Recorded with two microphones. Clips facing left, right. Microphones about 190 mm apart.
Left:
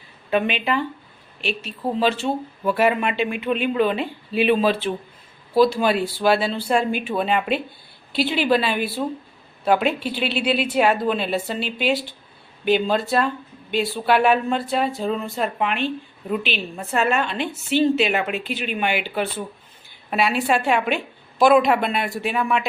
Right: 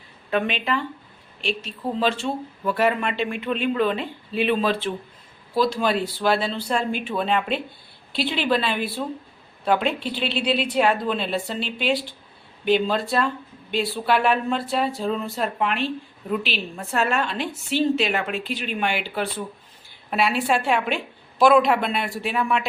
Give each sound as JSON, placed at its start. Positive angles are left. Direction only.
{"t": 0.3, "sound": "speech", "side_deg": 5}